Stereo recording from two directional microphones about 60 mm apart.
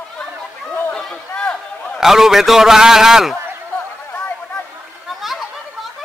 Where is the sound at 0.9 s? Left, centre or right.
Centre.